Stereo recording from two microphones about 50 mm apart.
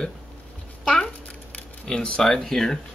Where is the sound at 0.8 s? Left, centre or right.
Centre.